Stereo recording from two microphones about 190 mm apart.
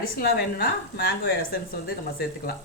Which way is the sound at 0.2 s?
55° left (ahead or behind).